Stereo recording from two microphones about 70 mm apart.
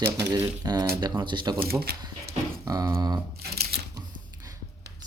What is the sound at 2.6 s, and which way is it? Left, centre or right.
Speech, right.